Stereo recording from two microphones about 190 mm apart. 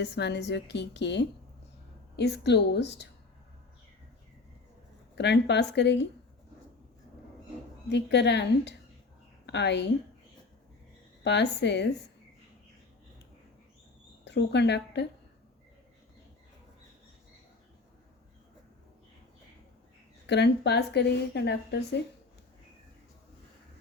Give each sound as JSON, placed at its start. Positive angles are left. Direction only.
{"t": 0.0, "sound": "a woman's voice", "side_deg": 65}
{"t": 5.1, "sound": "a woman's voice", "side_deg": 65}
{"t": 7.9, "sound": "a woman's voice", "side_deg": 65}
{"t": 11.2, "sound": "a woman's voice", "side_deg": 65}
{"t": 14.3, "sound": "speech", "side_deg": 65}
{"t": 20.2, "sound": "a woman's voice", "side_deg": 65}